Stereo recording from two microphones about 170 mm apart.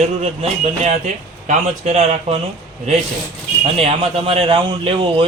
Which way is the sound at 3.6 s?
35° right (ahead or behind).